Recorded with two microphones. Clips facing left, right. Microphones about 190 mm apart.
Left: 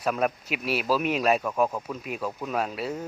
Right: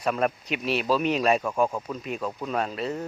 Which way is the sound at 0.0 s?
Centre (ahead or behind).